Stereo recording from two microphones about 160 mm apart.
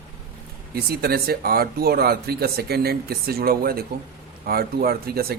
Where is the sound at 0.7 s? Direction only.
75° right (ahead or behind).